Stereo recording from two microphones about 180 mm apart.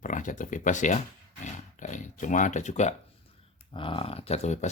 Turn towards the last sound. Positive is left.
turn(degrees=40)  # may be behind; listen again after turning